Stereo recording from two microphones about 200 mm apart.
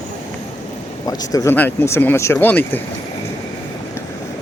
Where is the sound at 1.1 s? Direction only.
20° left (ahead or behind).